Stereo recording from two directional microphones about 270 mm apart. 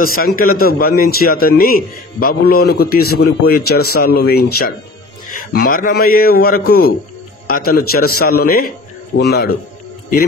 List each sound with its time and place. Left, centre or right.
0.0 s a man's voice: left